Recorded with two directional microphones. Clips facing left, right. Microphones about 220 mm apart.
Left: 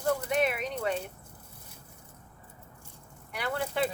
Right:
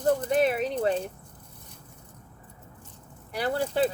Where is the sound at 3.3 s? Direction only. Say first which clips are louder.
Right 5 dB; 35° right (ahead or behind).